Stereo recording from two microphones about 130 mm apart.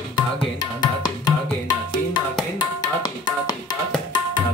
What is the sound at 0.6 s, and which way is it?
Tabla, 30° left (ahead or behind).